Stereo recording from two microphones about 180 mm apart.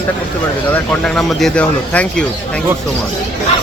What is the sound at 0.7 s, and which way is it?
Speech, 5° left (ahead or behind).